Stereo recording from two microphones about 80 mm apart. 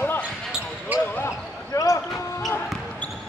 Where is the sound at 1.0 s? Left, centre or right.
Left.